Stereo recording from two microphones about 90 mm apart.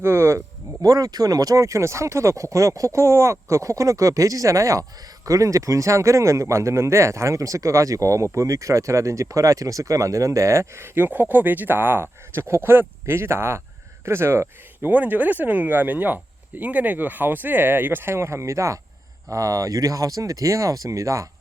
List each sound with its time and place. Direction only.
0.0 s speech: 30° right (ahead or behind)
10.9 s speech: 20° right (ahead or behind); by 21.2 s 35° right (ahead or behind)